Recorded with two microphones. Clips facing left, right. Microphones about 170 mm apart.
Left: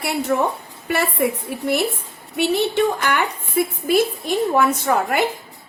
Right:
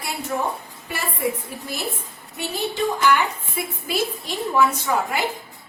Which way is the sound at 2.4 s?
60° left (ahead or behind).